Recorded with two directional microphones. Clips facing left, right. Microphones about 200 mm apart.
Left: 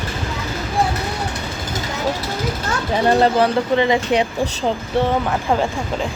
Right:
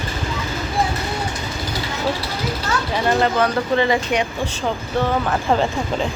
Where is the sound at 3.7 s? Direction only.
15° left (ahead or behind).